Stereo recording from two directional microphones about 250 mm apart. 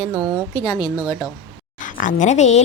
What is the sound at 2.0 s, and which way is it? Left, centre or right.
Speech, left.